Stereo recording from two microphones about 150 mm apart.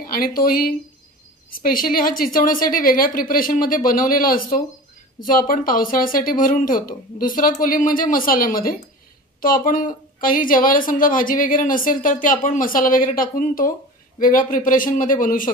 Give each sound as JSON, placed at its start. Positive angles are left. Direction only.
{"t": 0.1, "sound": "a woman's voice", "side_deg": 75}